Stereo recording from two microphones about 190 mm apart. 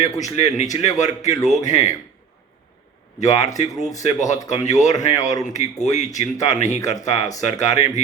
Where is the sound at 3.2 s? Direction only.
35° left (ahead or behind).